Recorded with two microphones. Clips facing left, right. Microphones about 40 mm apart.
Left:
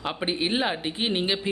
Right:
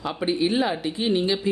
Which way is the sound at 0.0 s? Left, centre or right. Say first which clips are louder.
Right 4 dB; left.